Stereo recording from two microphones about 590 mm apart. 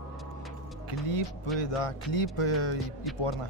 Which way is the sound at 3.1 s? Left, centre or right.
Centre.